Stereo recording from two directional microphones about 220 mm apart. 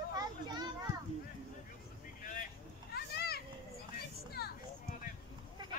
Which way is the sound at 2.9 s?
45° left (ahead or behind).